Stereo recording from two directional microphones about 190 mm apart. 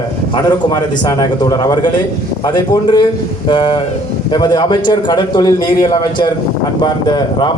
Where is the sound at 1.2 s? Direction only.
20° left (ahead or behind).